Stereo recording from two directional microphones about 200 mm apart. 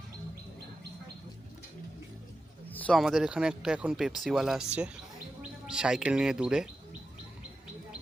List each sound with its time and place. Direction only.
2.7 s speech: 5° left (ahead or behind)